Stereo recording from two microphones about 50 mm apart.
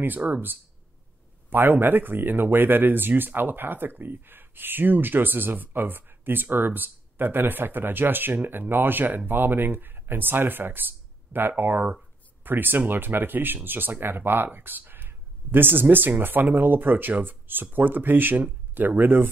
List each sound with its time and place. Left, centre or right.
0.0 s speech: right